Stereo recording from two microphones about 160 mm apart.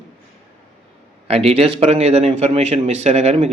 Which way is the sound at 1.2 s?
40° right (ahead or behind).